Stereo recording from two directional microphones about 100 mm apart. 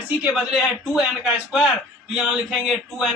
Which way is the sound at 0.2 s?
10° right (ahead or behind).